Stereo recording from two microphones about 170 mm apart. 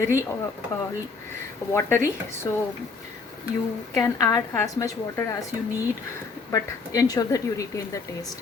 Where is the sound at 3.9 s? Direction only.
20° left (ahead or behind).